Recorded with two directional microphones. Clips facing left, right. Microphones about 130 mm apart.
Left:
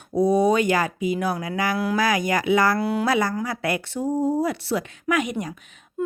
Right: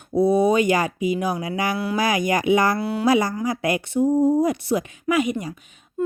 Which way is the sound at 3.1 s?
15° right (ahead or behind).